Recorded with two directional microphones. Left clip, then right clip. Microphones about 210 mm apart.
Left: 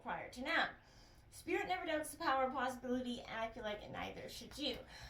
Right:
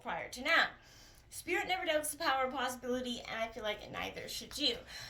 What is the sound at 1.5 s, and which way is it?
A woman's voice, 40° right (ahead or behind).